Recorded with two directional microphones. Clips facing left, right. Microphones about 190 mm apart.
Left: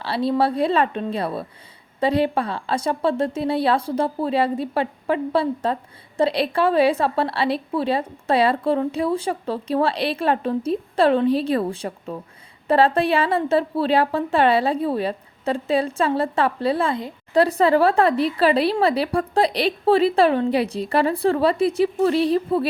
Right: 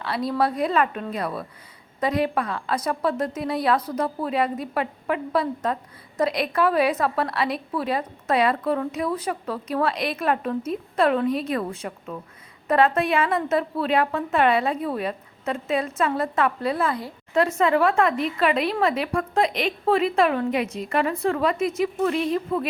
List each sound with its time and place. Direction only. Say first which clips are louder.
0.0 s a woman's voice: left 3 dB; 30° left (ahead or behind)